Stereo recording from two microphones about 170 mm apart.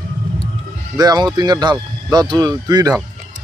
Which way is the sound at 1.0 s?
25° right (ahead or behind).